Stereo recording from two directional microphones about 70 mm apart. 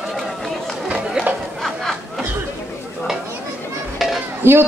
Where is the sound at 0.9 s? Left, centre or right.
Centre.